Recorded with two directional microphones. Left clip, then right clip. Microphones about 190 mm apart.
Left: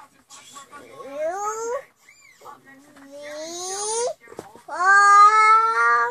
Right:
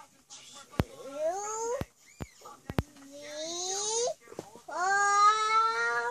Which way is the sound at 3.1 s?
Centre (ahead or behind).